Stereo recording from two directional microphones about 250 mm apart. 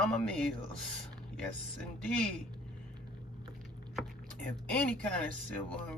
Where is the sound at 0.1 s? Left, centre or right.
Centre.